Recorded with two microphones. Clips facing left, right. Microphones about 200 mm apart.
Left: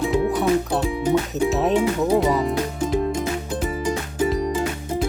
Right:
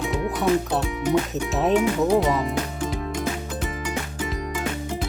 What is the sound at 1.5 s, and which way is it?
Speech, centre (ahead or behind).